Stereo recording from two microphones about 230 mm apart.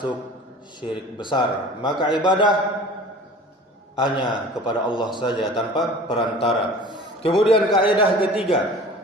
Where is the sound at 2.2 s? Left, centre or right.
Centre.